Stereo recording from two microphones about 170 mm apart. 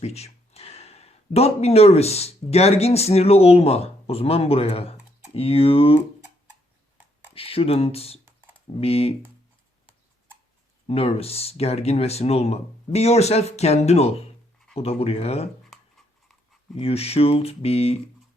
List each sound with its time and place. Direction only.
0.0 s speech: 40° left (ahead or behind)
7.3 s speech: 35° left (ahead or behind)
10.8 s speech: 35° left (ahead or behind)
16.7 s speech: 35° left (ahead or behind)